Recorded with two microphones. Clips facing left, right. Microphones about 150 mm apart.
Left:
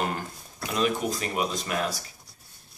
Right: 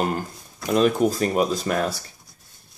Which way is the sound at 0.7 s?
40° right (ahead or behind).